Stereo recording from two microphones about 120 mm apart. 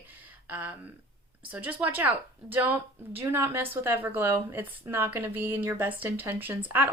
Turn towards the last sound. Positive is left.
turn(degrees=-15)  # may be behind; listen again after turning